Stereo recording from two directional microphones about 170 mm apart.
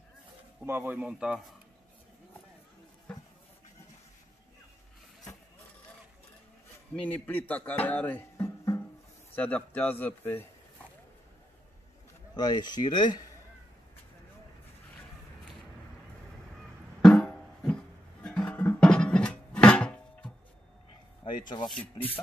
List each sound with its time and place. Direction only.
0.7 s speech: 10° right (ahead or behind)
7.1 s a man's voice: 10° left (ahead or behind)
7.8 s music: 10° left (ahead or behind)
9.3 s a man's voice: 10° left (ahead or behind)
12.4 s speech: 25° left (ahead or behind)
17.0 s music: 5° left (ahead or behind)
21.2 s rub: 25° left (ahead or behind)